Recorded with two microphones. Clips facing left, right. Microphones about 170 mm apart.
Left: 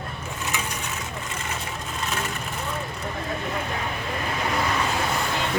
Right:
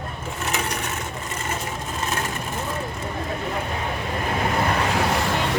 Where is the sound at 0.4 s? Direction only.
60° right (ahead or behind).